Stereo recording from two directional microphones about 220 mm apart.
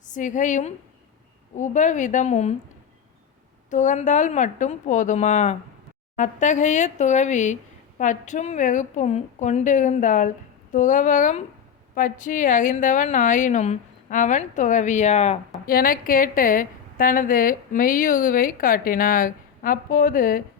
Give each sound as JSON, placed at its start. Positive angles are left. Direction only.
{"t": 0.0, "sound": "a woman's voice", "side_deg": 35}
{"t": 3.7, "sound": "speech", "side_deg": 35}
{"t": 15.6, "sound": "speech", "side_deg": 40}